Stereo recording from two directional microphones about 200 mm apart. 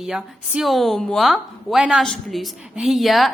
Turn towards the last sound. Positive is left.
turn(degrees=0)  # may be behind; listen again after turning